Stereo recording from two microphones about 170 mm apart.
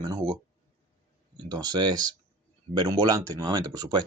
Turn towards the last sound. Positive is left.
turn(degrees=-25)  # may be behind; listen again after turning